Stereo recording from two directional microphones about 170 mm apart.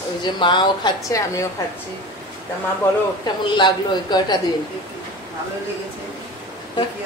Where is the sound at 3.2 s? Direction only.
25° left (ahead or behind).